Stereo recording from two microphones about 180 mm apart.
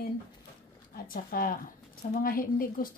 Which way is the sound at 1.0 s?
55° left (ahead or behind).